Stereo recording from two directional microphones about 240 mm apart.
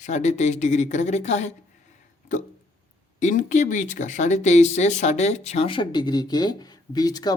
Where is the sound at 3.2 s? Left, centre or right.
Left.